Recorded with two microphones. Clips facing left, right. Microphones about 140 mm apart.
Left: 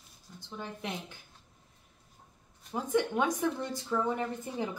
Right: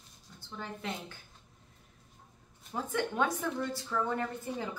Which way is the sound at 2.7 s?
15° left (ahead or behind).